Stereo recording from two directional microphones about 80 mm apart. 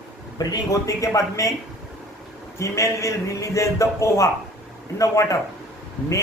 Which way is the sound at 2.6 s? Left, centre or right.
Left.